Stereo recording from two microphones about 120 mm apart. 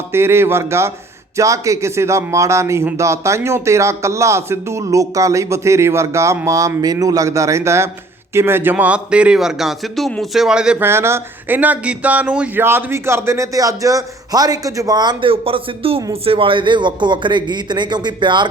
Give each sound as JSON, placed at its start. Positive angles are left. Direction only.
{"t": 0.1, "sound": "a man's voice", "side_deg": -20}
{"t": 10.8, "sound": "a man's voice", "side_deg": -20}
{"t": 15.3, "sound": "a man's voice", "side_deg": -50}